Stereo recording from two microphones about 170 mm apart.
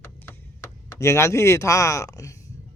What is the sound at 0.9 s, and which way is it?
Speech, 15° left (ahead or behind).